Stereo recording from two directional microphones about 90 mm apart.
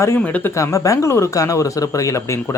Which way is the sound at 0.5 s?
35° left (ahead or behind).